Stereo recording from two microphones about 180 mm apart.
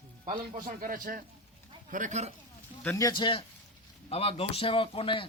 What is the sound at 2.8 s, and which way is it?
A man's voice, 15° left (ahead or behind).